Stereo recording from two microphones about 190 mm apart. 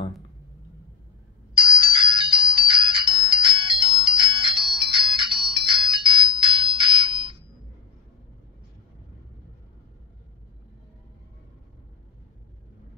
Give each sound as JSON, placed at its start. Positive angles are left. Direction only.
{"t": 1.5, "sound": "ringtone", "side_deg": -30}